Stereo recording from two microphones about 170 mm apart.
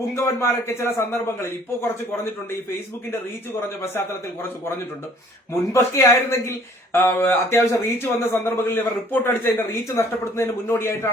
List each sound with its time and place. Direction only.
0.2 s a man's voice: 15° left (ahead or behind)
3.1 s a man's voice: 15° left (ahead or behind)
5.7 s a man's voice: 15° left (ahead or behind)